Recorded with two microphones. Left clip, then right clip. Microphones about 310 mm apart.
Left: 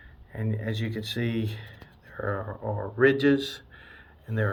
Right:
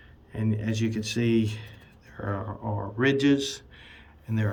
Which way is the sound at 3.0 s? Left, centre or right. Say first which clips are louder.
Left 2 dB; centre.